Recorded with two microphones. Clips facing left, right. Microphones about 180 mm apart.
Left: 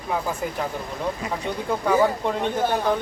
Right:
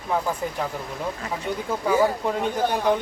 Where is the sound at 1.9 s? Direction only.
5° right (ahead or behind).